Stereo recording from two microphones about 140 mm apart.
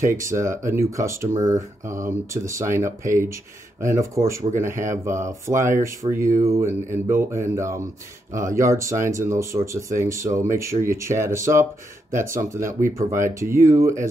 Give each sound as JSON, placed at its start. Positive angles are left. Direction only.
{"t": 0.2, "sound": "speech", "side_deg": -20}